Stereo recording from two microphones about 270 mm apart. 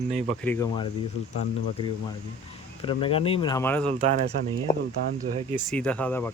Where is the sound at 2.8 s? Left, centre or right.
Centre.